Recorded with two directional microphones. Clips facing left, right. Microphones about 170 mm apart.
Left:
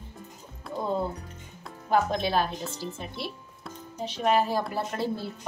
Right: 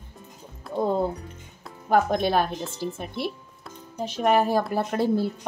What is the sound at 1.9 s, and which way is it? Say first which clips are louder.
Speech: right 4 dB; 55° right (ahead or behind).